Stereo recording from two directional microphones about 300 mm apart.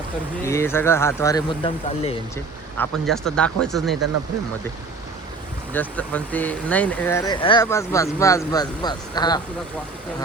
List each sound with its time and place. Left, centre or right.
0.4 s speech: centre
2.7 s speech: centre
5.7 s speech: centre